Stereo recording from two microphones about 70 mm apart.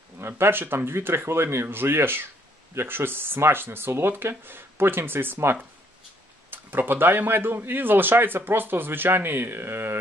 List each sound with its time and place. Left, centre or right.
0.2 s speech: right